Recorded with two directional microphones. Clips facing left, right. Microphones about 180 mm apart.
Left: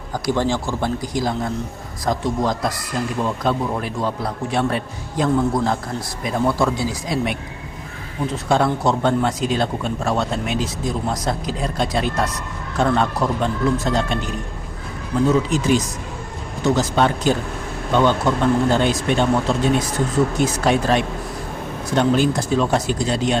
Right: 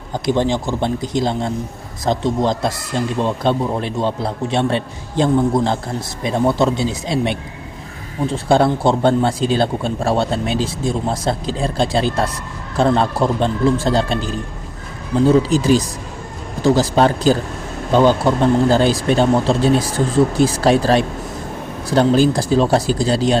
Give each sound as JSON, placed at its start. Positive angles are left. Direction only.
{"t": 0.1, "sound": "speech", "side_deg": -20}